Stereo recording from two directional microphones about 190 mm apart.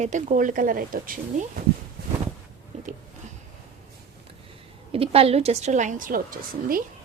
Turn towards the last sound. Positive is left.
turn(degrees=-50)  # may be behind; listen again after turning